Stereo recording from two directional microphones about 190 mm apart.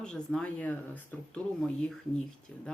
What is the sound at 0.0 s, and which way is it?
Speech, 5° left (ahead or behind).